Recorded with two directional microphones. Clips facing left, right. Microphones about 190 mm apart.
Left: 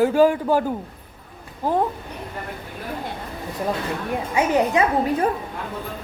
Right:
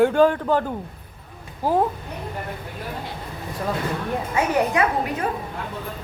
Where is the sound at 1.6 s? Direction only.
5° right (ahead or behind).